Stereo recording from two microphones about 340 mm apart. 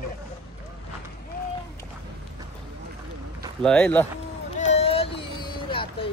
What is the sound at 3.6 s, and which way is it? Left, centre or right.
Speech, centre.